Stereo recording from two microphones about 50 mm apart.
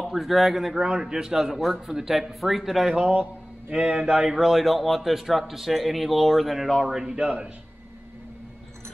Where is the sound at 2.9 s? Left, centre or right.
Right; by 7.2 s centre.